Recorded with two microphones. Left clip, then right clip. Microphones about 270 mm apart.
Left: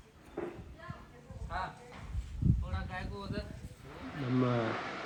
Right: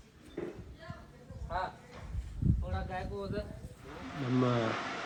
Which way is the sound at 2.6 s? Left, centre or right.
Right.